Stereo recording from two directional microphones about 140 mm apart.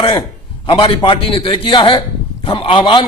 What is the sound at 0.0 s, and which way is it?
A man's voice, 40° left (ahead or behind).